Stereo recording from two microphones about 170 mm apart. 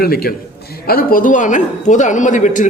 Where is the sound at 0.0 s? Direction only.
60° left (ahead or behind).